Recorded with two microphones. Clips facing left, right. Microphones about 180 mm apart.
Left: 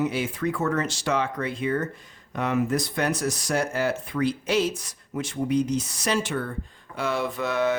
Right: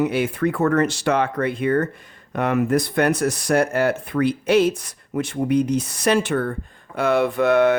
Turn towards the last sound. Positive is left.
turn(degrees=-60)  # may be behind; listen again after turning